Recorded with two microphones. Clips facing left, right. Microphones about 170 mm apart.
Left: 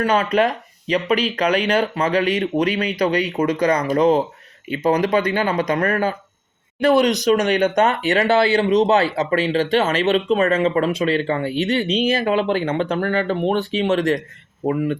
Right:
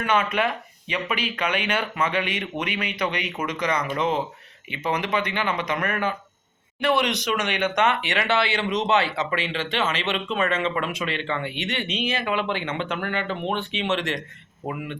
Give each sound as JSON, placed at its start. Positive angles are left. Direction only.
{"t": 0.0, "sound": "speech", "side_deg": 35}